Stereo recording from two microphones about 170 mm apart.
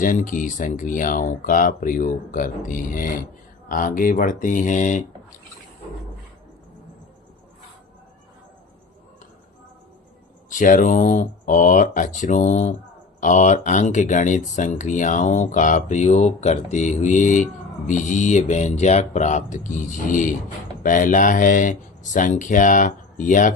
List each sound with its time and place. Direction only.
0.0 s speech: 50° left (ahead or behind)
10.5 s speech: 50° left (ahead or behind)